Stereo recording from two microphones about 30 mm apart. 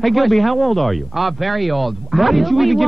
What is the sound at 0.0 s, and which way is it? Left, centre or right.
A man's voice, centre.